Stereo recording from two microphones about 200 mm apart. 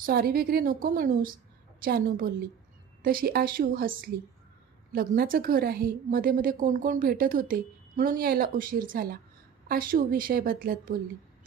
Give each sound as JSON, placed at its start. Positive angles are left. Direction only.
{"t": 0.0, "sound": "a woman's voice", "side_deg": -50}